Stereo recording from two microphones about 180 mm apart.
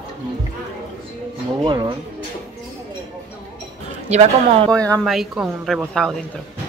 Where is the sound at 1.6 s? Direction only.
25° right (ahead or behind).